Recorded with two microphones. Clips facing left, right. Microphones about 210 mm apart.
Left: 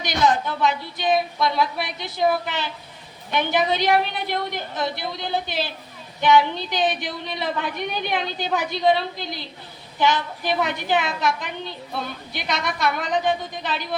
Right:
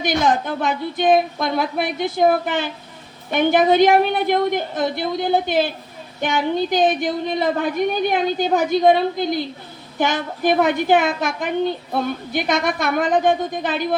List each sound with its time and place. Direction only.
0.0 s a woman's voice: 50° right (ahead or behind)